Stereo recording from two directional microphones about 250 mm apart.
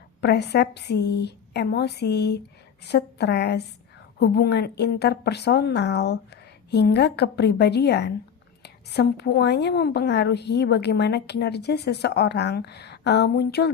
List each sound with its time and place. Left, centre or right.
0.2 s a woman's voice: left